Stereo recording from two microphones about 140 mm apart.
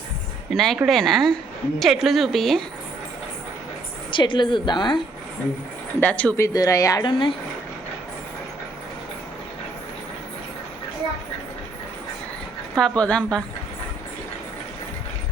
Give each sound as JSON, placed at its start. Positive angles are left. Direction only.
{"t": 0.5, "sound": "a woman's voice", "side_deg": 5}
{"t": 4.1, "sound": "a woman's voice", "side_deg": 35}
{"t": 6.0, "sound": "a woman's voice", "side_deg": 10}
{"t": 6.4, "sound": "speech", "side_deg": 25}
{"t": 7.1, "sound": "a woman's voice", "side_deg": 40}
{"t": 12.7, "sound": "a woman's voice", "side_deg": 5}